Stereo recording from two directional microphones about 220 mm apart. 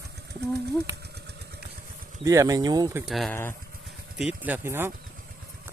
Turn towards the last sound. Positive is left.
turn(degrees=-10)  # may be behind; listen again after turning